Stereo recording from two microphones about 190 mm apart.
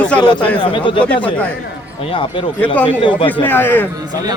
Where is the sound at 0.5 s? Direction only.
25° left (ahead or behind).